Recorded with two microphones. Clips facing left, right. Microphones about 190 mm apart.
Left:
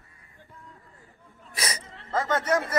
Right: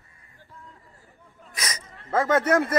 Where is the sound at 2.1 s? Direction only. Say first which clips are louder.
Right 4 dB; 55° right (ahead or behind).